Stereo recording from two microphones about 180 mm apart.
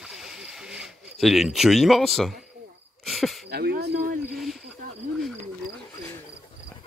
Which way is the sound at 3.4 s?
60° right (ahead or behind).